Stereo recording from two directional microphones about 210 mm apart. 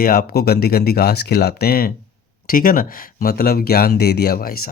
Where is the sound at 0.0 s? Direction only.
45° left (ahead or behind).